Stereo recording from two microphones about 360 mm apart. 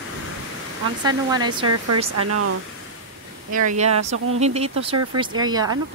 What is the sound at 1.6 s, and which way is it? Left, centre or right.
Speech, right.